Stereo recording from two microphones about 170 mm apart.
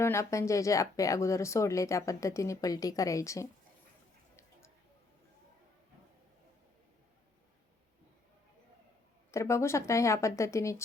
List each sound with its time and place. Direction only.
0.0 s speech: 15° left (ahead or behind)
9.3 s speech: 15° left (ahead or behind)